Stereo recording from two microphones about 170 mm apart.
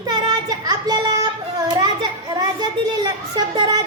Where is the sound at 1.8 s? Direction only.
25° right (ahead or behind).